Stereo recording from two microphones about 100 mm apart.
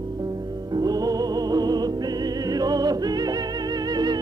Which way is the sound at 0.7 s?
40° right (ahead or behind).